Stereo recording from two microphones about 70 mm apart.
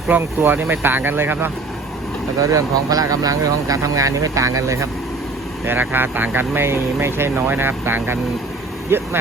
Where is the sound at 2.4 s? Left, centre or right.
Right.